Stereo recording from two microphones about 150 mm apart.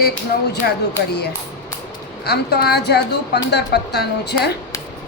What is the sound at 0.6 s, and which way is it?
Speech, 90° left.